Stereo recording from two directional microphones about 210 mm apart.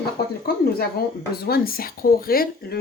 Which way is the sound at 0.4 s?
45° left (ahead or behind).